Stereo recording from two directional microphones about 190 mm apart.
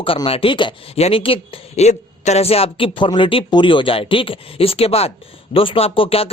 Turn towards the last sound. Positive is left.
turn(degrees=30)  # may be behind; listen again after turning